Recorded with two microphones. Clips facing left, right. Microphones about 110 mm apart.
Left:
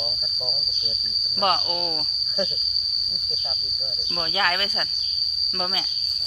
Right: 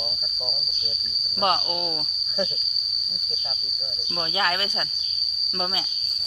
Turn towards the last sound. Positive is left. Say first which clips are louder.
# left 1 dB
turn(degrees=-25)  # may be behind; listen again after turning